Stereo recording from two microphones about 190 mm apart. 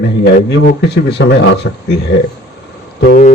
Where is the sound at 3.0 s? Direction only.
40° left (ahead or behind).